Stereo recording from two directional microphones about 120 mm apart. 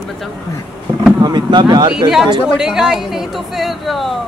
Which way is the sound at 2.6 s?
5° right (ahead or behind).